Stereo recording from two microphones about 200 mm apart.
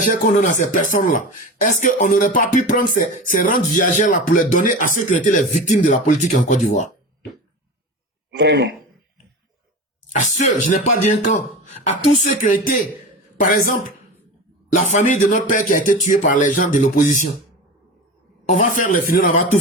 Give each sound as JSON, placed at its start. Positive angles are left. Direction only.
{"t": 0.0, "sound": "speech", "side_deg": 40}
{"t": 8.3, "sound": "a man's voice", "side_deg": -55}
{"t": 10.1, "sound": "a woman's voice", "side_deg": 40}
{"t": 18.4, "sound": "speech", "side_deg": 40}